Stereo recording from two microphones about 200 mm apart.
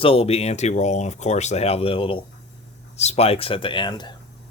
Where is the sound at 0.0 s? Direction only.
30° left (ahead or behind).